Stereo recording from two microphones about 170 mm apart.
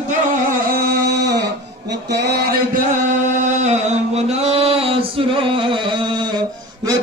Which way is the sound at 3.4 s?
45° right (ahead or behind).